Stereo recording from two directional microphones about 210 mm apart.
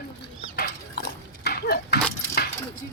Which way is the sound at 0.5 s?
45° left (ahead or behind).